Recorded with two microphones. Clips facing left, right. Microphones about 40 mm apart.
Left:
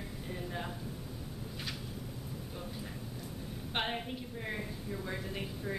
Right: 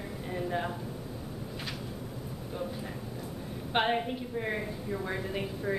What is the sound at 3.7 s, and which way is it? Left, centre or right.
Speech, centre.